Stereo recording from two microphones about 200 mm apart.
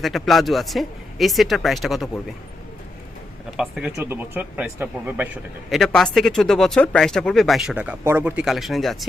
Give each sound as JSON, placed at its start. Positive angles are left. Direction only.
{"t": 0.0, "sound": "speech", "side_deg": 0}
{"t": 3.6, "sound": "speech", "side_deg": -5}